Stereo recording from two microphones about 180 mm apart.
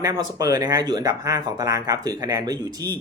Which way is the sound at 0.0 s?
20° right (ahead or behind).